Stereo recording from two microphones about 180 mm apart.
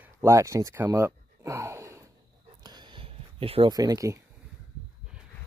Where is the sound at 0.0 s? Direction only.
15° right (ahead or behind).